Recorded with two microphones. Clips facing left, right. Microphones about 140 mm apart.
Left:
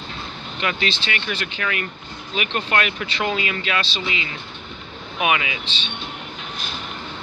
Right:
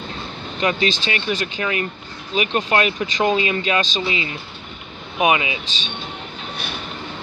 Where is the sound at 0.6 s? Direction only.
35° right (ahead or behind).